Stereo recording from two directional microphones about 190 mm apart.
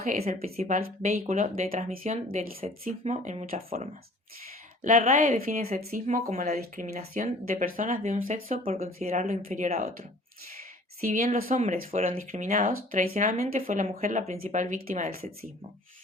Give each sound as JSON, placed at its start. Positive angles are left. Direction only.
{"t": 0.0, "sound": "speech", "side_deg": -40}
{"t": 0.8, "sound": "speech", "side_deg": -50}
{"t": 4.8, "sound": "speech", "side_deg": -40}
{"t": 11.0, "sound": "speech", "side_deg": -45}